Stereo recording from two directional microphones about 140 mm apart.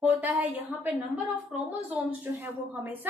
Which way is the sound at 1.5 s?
5° right (ahead or behind).